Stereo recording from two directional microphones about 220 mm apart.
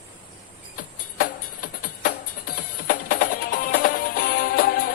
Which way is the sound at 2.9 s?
40° left (ahead or behind).